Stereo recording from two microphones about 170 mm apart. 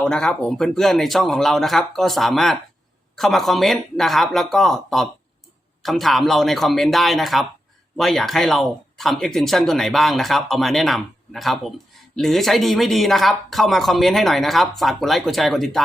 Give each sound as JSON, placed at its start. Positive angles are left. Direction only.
{"t": 0.0, "sound": "speech", "side_deg": 5}